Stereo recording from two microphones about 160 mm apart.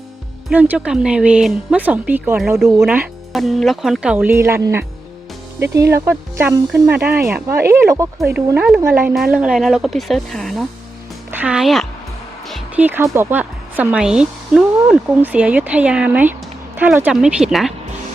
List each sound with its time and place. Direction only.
0.5 s speech: 10° right (ahead or behind)
3.3 s speech: centre (ahead or behind); by 8.3 s 15° right (ahead or behind)
8.5 s speech: 5° right (ahead or behind)
11.3 s speech: 10° right (ahead or behind)
12.7 s speech: 10° right (ahead or behind)